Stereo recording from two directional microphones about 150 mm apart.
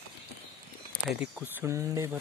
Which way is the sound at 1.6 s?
15° right (ahead or behind).